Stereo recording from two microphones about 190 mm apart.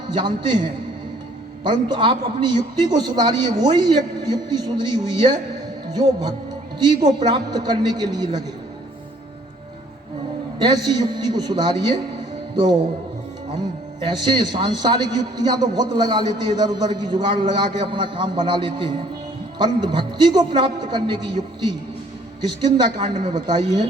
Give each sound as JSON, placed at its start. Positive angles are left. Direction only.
{"t": 0.1, "sound": "a man's voice", "side_deg": -25}
{"t": 1.6, "sound": "a man's voice", "side_deg": -25}
{"t": 10.6, "sound": "a man's voice", "side_deg": -20}
{"t": 14.0, "sound": "a man's voice", "side_deg": -25}